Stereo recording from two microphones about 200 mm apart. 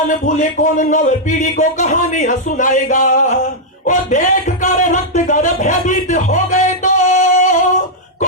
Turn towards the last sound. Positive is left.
turn(degrees=35)  # may be behind; listen again after turning